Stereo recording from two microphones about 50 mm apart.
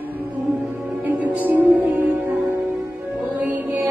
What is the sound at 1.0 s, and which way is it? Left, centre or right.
Music, right.